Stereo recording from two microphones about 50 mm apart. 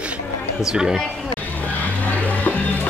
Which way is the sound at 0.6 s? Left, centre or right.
Centre.